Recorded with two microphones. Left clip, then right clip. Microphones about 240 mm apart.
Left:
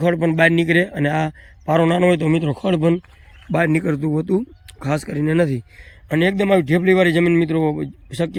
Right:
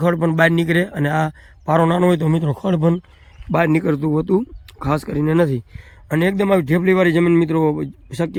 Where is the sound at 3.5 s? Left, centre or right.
Centre.